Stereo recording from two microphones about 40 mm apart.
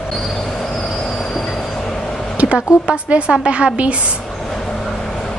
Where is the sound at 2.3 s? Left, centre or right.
Right.